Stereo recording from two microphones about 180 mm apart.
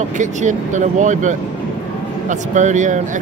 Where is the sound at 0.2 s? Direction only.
45° right (ahead or behind).